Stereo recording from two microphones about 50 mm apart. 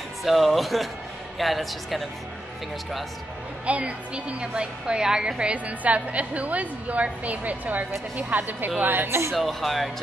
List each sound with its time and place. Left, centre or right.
0.2 s speech: centre
3.6 s a woman's voice: right
9.3 s speech: centre